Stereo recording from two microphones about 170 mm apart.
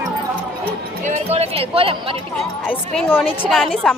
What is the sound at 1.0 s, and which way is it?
Music, 40° right (ahead or behind).